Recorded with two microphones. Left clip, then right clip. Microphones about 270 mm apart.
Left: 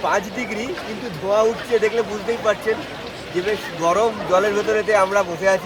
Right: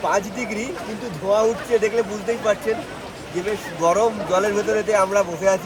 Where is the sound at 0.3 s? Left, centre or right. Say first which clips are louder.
Left 1 dB; centre.